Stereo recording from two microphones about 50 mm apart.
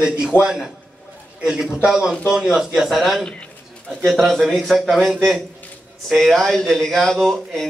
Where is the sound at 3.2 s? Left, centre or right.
Centre.